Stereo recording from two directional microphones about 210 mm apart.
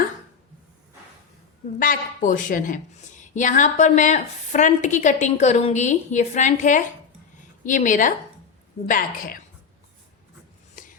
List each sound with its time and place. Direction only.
1.8 s a woman's voice: 40° left (ahead or behind)